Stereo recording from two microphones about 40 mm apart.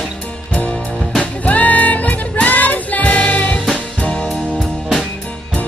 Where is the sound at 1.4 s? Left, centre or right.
Left.